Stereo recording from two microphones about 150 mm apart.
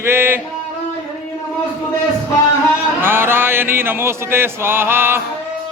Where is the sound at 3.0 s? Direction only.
15° right (ahead or behind).